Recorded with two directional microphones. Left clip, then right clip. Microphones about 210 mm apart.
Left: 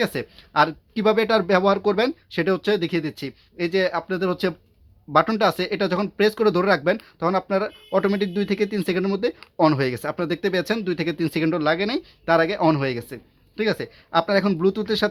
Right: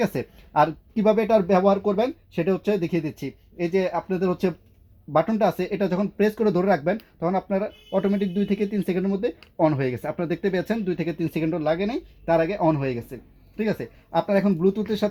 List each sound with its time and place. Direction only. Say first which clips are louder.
0.0 s speech: left 1 dB; 5° right (ahead or behind)
0.6 s speech: left 1 dB; 5° left (ahead or behind)
1.9 s speech: left 2 dB; 15° left (ahead or behind)